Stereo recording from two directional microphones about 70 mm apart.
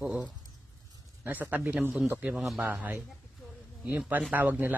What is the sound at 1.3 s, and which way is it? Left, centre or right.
Speech, right.